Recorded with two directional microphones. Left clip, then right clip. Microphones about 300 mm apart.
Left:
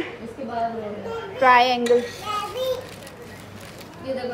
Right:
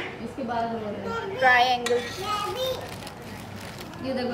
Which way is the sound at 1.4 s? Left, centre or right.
Centre.